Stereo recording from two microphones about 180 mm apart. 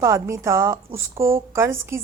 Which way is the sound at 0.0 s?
15° right (ahead or behind).